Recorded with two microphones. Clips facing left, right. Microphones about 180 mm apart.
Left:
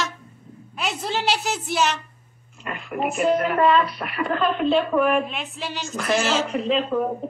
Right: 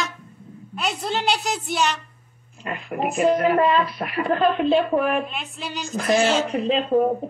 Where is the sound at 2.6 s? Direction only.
35° right (ahead or behind).